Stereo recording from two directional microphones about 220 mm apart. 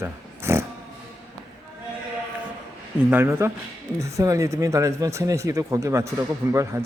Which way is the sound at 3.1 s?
10° right (ahead or behind).